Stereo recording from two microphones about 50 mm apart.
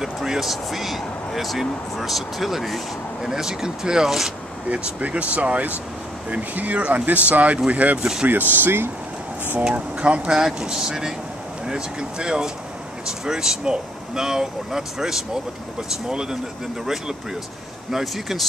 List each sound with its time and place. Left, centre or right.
0.0 s speech: centre
4.6 s speech: right
8.0 s speech: centre
8.5 s speech: right
9.7 s speech: right
17.9 s speech: centre